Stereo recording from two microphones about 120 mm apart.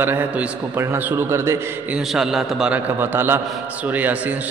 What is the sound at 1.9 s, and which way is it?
A man's voice, 5° right (ahead or behind).